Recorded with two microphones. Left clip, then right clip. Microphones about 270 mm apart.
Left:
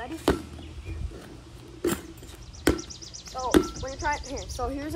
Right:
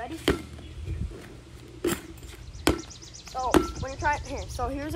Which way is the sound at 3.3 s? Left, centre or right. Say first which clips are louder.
Right 2 dB; centre.